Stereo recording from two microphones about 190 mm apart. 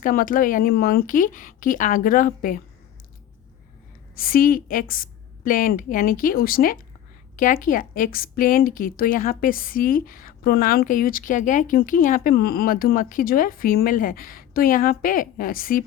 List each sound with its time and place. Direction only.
0.0 s a woman's voice: 45° left (ahead or behind)
4.1 s a woman's voice: 50° left (ahead or behind)